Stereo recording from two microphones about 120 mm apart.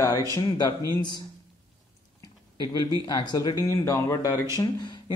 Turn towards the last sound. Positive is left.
turn(degrees=35)  # may be behind; listen again after turning